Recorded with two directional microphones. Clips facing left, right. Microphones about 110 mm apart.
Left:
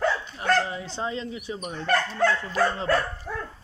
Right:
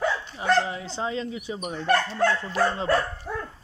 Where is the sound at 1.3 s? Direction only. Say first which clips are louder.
Right 1 dB; 20° right (ahead or behind).